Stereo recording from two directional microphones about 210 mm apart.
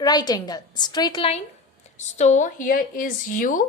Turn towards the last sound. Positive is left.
turn(degrees=40)  # may be behind; listen again after turning